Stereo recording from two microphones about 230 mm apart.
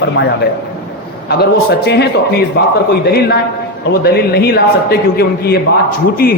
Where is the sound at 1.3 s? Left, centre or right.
Left.